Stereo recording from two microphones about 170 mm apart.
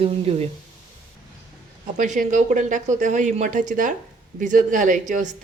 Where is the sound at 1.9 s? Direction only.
50° right (ahead or behind).